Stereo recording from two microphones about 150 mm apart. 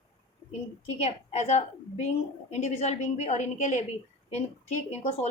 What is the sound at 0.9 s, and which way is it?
A woman's voice, 50° left (ahead or behind).